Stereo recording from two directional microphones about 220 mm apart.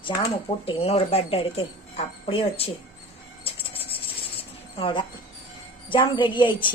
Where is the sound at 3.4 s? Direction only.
25° left (ahead or behind).